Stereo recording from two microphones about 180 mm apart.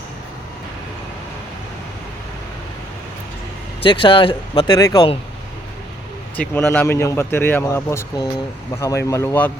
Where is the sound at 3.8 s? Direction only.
30° left (ahead or behind).